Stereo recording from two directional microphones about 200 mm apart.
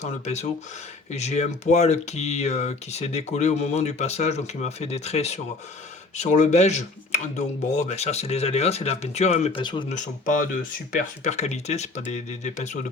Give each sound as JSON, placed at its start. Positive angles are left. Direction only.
{"t": 0.0, "sound": "speech", "side_deg": 35}
{"t": 9.9, "sound": "speech", "side_deg": 40}